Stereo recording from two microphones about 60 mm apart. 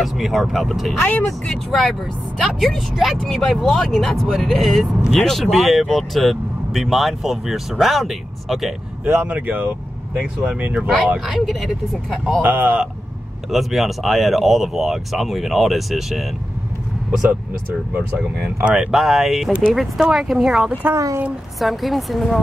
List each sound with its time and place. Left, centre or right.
0.0 s speech: centre
0.9 s speech: left
1.7 s speech: centre
9.0 s speech: right
9.3 s speech: right
11.2 s speech: centre
12.4 s speech: right
13.5 s speech: centre
18.6 s speech: centre
20.9 s speech: right
21.5 s speech: centre